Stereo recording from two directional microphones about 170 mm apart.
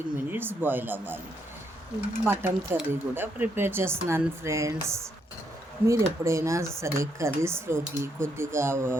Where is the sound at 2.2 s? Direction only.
10° right (ahead or behind).